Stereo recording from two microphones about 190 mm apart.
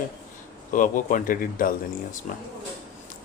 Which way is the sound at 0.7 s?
45° left (ahead or behind).